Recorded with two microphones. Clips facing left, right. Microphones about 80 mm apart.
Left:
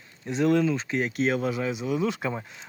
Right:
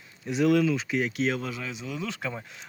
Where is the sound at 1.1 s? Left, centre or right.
Centre.